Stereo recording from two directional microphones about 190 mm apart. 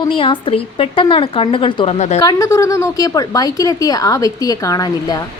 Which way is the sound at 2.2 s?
20° left (ahead or behind).